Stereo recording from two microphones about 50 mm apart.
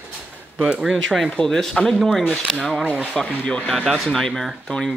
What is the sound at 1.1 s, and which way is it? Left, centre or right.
Speech, centre.